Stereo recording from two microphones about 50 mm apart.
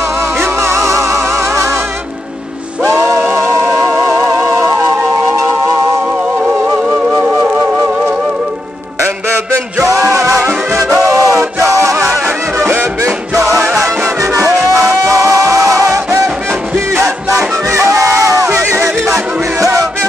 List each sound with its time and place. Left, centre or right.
0.6 s music: right
2.9 s music: right
9.8 s music: right
11.1 s a sound: right
11.7 s music: right
13.4 s music: centre
13.7 s music: right
17.6 s music: right
18.5 s music: right